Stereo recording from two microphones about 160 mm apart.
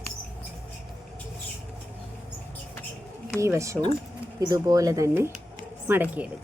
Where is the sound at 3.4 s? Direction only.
20° right (ahead or behind).